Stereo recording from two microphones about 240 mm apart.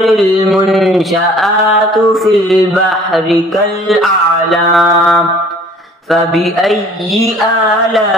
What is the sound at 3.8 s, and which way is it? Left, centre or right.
Mantra, centre.